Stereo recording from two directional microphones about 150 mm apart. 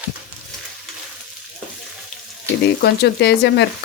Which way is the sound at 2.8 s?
90° left.